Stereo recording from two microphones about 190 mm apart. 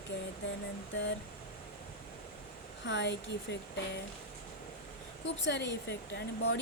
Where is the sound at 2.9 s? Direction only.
65° left (ahead or behind).